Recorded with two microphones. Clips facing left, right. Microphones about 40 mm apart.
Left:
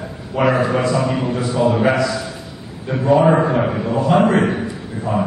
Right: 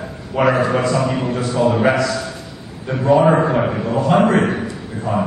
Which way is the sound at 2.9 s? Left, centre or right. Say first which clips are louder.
Even; centre.